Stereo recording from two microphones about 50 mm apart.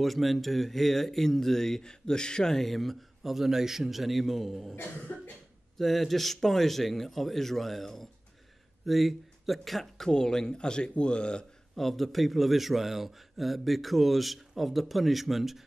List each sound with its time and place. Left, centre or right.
0.0 s speech: centre
5.1 s cough: left
5.8 s speech: centre
10.0 s speech: centre
11.7 s speech: centre